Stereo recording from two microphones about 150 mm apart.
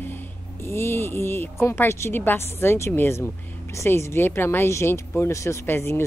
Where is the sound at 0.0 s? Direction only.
15° left (ahead or behind).